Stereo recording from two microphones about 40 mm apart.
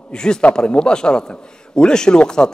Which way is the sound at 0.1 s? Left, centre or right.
Centre.